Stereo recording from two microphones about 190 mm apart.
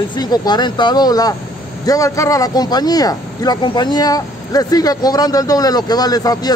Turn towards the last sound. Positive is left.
turn(degrees=20)  # may be behind; listen again after turning